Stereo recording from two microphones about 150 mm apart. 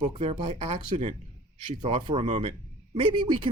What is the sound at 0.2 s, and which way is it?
Speech, 40° right (ahead or behind).